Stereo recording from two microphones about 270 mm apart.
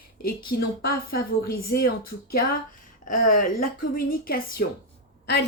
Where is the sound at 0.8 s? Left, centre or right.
Left.